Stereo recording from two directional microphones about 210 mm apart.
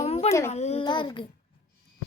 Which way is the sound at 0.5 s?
30° left (ahead or behind).